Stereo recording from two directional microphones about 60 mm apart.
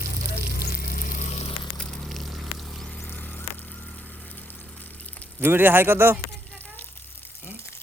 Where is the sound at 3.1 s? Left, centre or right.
Left.